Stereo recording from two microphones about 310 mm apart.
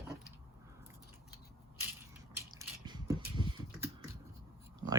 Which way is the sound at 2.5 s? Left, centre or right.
Centre.